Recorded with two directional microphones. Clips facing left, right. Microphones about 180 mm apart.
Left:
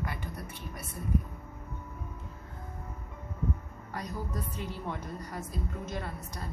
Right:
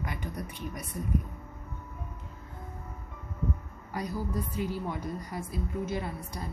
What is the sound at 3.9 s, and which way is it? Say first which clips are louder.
A woman's voice: right 4 dB; 10° right (ahead or behind).